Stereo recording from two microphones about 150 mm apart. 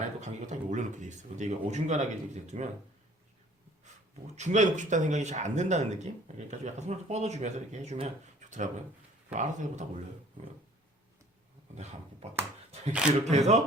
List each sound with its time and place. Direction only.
0.2 s speech: 50° right (ahead or behind)
4.4 s speech: 50° right (ahead or behind)
11.7 s speech: 50° right (ahead or behind)
12.9 s speech: 5° right (ahead or behind)
13.3 s speech: 50° right (ahead or behind)